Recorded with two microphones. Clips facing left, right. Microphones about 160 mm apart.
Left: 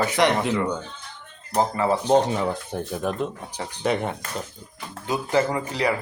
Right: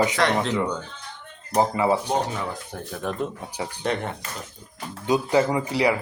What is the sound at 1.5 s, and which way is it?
Speech, 15° right (ahead or behind).